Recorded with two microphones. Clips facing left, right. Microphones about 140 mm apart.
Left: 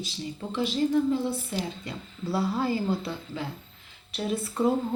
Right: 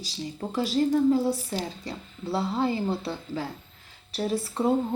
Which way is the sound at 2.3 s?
25° right (ahead or behind).